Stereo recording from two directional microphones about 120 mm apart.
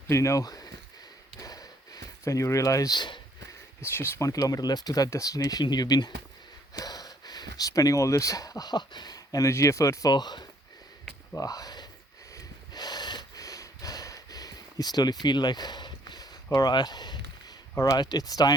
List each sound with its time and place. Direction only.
0.1 s speech: 25° left (ahead or behind)
1.4 s a sound: 30° left (ahead or behind)
3.8 s speech: 20° left (ahead or behind)
4.3 s speech: 30° left (ahead or behind)
12.3 s snort: 30° left (ahead or behind)